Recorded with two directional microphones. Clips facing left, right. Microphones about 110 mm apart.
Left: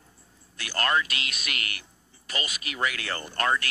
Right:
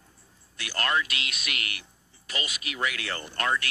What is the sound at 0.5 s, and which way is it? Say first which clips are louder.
Speech: left 2 dB; 40° left (ahead or behind).